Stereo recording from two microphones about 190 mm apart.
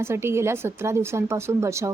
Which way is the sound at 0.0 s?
15° right (ahead or behind).